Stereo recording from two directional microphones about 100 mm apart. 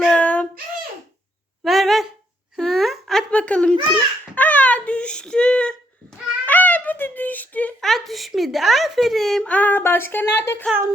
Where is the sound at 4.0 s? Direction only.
15° left (ahead or behind).